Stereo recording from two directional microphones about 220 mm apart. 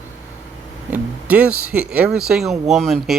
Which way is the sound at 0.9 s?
5° right (ahead or behind).